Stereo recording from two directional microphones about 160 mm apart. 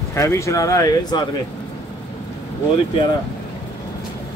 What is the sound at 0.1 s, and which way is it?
Speech, 15° left (ahead or behind).